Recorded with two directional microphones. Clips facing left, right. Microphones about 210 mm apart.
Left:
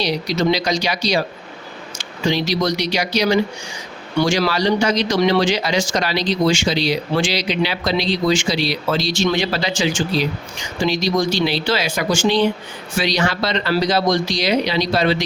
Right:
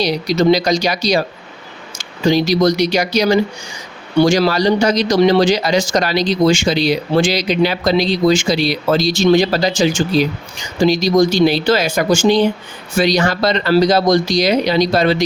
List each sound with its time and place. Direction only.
0.0 s speech: 40° right (ahead or behind)